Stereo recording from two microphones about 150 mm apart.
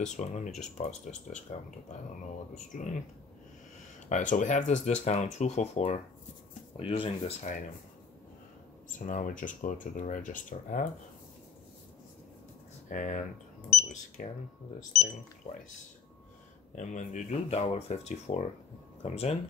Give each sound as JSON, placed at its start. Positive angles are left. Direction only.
{"t": 0.0, "sound": "speech", "side_deg": 50}
{"t": 4.1, "sound": "speech", "side_deg": 60}
{"t": 9.0, "sound": "speech", "side_deg": 60}
{"t": 12.8, "sound": "speech", "side_deg": 60}
{"t": 16.7, "sound": "speech", "side_deg": 55}